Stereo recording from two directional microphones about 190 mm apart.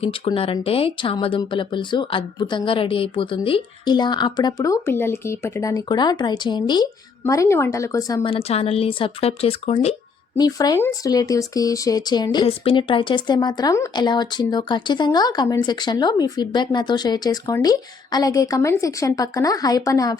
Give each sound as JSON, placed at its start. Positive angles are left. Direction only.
{"t": 0.0, "sound": "speech", "side_deg": 30}
{"t": 10.3, "sound": "speech", "side_deg": 20}